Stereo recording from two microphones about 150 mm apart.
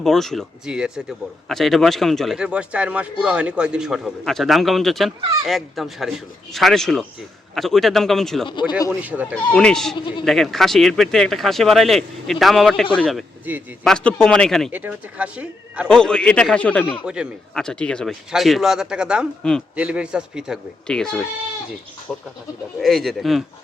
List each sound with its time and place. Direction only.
0.0 s a man's voice: centre (ahead or behind)
8.4 s speech: 30° left (ahead or behind)
8.9 s speech: 10° right (ahead or behind)
9.3 s a man's voice: 5° left (ahead or behind)
9.9 s speech: 30° left (ahead or behind)
10.2 s a man's voice: centre (ahead or behind)
13.5 s speech: 10° right (ahead or behind)
13.8 s a man's voice: 5° left (ahead or behind)
14.7 s speech: 10° right (ahead or behind)
15.9 s a man's voice: 5° left (ahead or behind)
19.4 s a man's voice: 5° left (ahead or behind)
19.7 s a man's voice: 10° right (ahead or behind)